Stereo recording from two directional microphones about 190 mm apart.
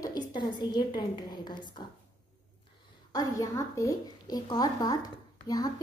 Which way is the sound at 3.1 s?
20° left (ahead or behind).